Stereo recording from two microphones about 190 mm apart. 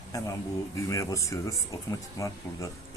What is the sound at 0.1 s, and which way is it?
Speech, 20° left (ahead or behind).